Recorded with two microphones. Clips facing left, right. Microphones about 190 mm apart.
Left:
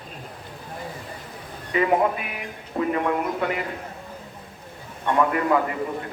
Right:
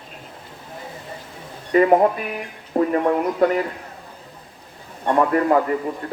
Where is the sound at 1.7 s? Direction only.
45° right (ahead or behind).